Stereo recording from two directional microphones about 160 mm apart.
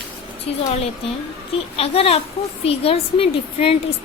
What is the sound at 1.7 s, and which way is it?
A woman's voice, 40° left (ahead or behind).